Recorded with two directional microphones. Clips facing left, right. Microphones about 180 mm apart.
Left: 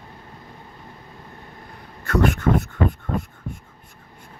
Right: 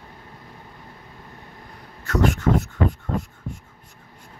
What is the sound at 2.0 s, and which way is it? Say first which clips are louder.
Speech: left 1 dB; 55° left (ahead or behind).